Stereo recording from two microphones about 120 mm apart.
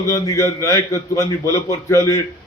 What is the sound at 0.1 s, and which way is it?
A man's voice, 30° left (ahead or behind).